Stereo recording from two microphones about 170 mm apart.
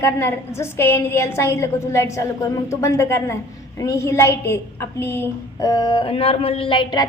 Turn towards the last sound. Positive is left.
turn(degrees=25)  # may be behind; listen again after turning